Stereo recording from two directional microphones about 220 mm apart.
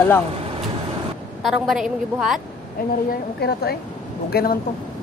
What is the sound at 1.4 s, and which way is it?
A woman's voice, centre (ahead or behind).